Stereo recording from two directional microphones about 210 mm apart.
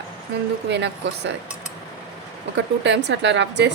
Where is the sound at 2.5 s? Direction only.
60° right (ahead or behind).